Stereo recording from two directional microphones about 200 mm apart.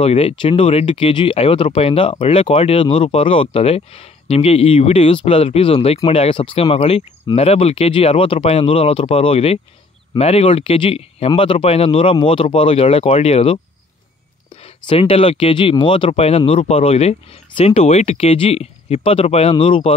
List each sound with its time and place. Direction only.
0.0 s speech: 30° left (ahead or behind)
14.6 s speech: 30° left (ahead or behind)